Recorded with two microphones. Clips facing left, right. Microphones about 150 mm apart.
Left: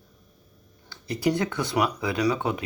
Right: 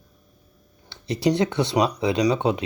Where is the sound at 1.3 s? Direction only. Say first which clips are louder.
Right 5 dB; 20° right (ahead or behind).